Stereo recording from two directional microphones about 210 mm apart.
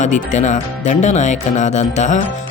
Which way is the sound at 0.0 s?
35° left (ahead or behind).